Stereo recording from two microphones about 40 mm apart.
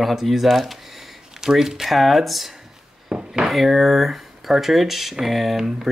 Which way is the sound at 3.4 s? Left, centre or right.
Centre.